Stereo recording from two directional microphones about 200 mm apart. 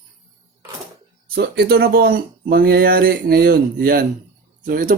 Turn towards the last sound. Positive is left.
turn(degrees=-45)  # may be behind; listen again after turning